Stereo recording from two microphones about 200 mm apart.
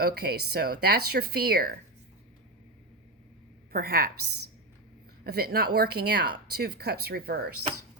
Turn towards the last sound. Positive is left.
turn(degrees=-50)  # may be behind; listen again after turning